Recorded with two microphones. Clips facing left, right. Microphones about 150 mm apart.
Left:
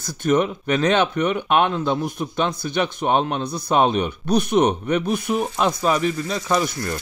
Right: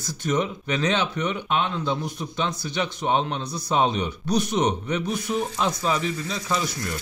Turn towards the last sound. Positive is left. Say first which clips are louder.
# left 5 dB
turn(degrees=50)  # may be behind; listen again after turning